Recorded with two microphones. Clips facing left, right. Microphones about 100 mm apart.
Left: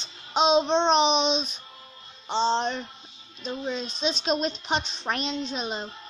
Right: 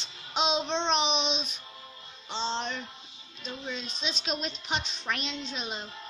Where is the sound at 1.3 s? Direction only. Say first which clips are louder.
Left 7 dB; 10° right (ahead or behind).